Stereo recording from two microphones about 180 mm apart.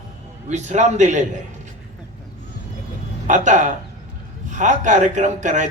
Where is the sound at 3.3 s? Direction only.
45° right (ahead or behind).